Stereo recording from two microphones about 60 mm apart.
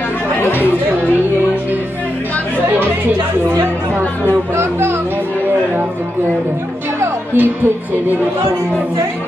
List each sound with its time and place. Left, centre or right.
4.3 s music: right
7.3 s music: right